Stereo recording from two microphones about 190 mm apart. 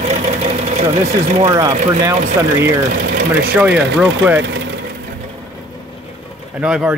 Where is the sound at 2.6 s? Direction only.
55° right (ahead or behind).